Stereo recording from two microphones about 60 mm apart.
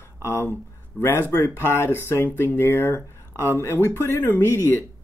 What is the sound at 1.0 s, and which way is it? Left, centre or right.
Speech, left.